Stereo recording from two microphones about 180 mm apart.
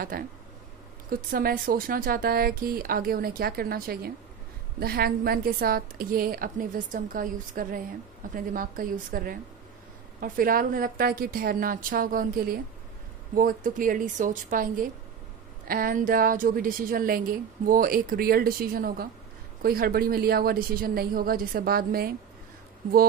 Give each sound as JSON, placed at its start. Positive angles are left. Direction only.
{"t": 0.1, "sound": "a woman's voice", "side_deg": -55}